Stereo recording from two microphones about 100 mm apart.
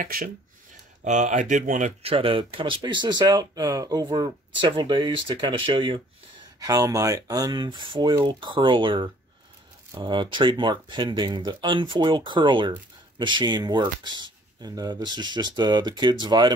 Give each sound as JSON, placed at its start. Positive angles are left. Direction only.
{"t": 2.0, "sound": "speech", "side_deg": -65}
{"t": 6.6, "sound": "speech", "side_deg": -35}